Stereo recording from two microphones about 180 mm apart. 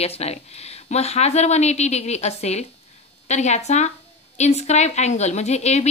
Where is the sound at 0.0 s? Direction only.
35° left (ahead or behind).